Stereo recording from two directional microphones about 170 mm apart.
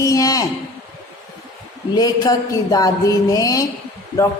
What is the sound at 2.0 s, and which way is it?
A woman's voice, 20° left (ahead or behind).